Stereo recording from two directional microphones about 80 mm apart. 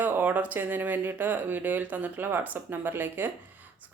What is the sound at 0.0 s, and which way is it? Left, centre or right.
A woman's voice, right.